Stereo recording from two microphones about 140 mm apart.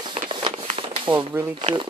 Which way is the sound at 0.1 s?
40° right (ahead or behind).